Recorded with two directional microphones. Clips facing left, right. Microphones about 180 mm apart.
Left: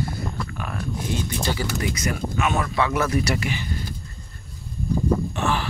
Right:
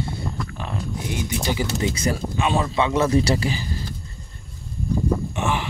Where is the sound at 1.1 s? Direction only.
15° right (ahead or behind); by 3.8 s 30° right (ahead or behind).